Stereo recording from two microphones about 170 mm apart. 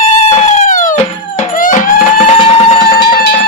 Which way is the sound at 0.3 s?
40° left (ahead or behind).